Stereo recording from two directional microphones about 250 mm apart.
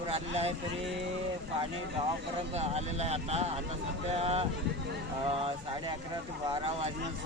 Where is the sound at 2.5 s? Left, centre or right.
Right.